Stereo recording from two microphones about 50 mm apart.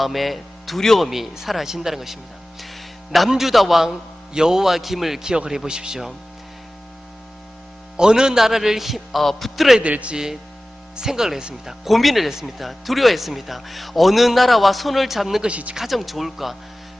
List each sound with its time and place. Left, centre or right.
0.0 s speech: centre
1.0 s a man's voice: centre
7.9 s a man's voice: centre
9.8 s a man's voice: right
10.9 s speech: centre
15.4 s a man's voice: right
15.7 s speech: centre